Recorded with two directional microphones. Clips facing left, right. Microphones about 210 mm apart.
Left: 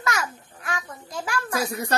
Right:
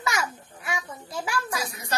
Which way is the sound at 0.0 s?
10° right (ahead or behind).